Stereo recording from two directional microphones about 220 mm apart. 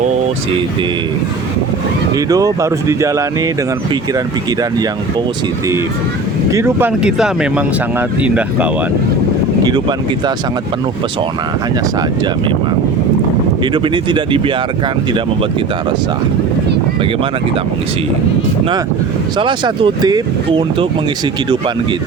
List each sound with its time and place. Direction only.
2.1 s speech: 15° right (ahead or behind)
6.5 s speech: 15° right (ahead or behind)
13.7 s speech: 20° right (ahead or behind)
19.4 s speech: 20° right (ahead or behind)